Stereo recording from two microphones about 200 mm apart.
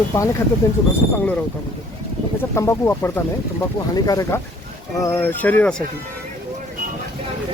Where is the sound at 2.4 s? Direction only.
10° left (ahead or behind).